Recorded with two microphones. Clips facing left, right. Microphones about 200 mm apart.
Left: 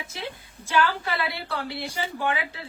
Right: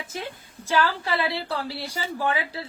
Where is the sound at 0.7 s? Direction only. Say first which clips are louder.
Right 1 dB; 35° right (ahead or behind).